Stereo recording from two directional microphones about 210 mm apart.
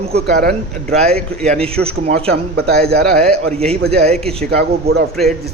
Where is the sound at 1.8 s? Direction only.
30° right (ahead or behind).